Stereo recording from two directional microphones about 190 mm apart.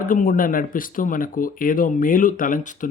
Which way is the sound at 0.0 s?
45° left (ahead or behind).